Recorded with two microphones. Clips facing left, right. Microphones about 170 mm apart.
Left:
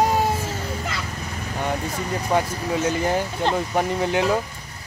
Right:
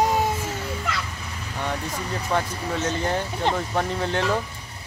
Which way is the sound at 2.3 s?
15° left (ahead or behind).